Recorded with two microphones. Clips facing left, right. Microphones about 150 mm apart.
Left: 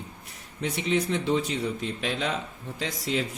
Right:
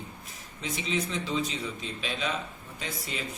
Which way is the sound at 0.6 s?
65° left (ahead or behind).